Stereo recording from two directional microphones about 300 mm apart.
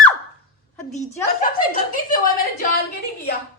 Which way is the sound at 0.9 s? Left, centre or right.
Left.